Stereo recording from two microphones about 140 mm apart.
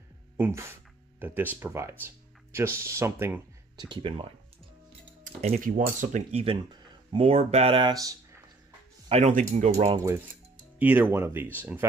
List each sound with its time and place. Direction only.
0.4 s speech: 20° right (ahead or behind)
3.9 s speech: 35° right (ahead or behind)
5.2 s speech: 50° right (ahead or behind)
5.6 s speech: 70° right (ahead or behind)
6.4 s speech: 40° right (ahead or behind)
9.3 s speech: 65° right (ahead or behind)
9.9 s speech: 20° right (ahead or behind)
10.8 s speech: 10° right (ahead or behind)